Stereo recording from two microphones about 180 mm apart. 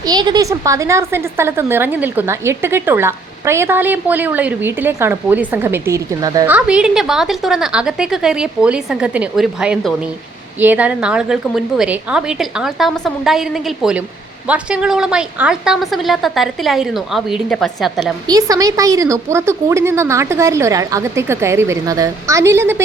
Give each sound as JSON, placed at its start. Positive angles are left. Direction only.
{"t": 0.0, "sound": "a woman's voice", "side_deg": -20}
{"t": 6.5, "sound": "a woman's voice", "side_deg": -5}
{"t": 18.3, "sound": "a woman's voice", "side_deg": -20}